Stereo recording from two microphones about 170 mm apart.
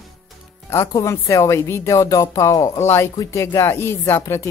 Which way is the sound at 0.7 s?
15° left (ahead or behind).